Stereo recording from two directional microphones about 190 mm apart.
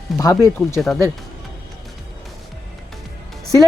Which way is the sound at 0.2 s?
20° left (ahead or behind).